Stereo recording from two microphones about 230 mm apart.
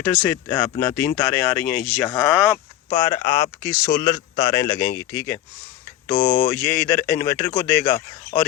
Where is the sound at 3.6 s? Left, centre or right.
Centre.